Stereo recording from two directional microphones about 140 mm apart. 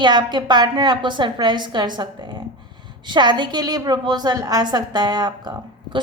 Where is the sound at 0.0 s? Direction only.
30° right (ahead or behind).